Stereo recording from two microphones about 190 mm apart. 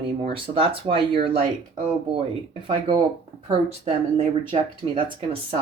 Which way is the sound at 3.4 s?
30° right (ahead or behind).